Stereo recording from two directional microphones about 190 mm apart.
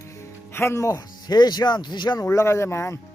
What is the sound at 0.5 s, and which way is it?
Speech, 15° left (ahead or behind).